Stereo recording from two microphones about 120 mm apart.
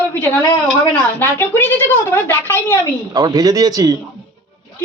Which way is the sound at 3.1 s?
30° right (ahead or behind).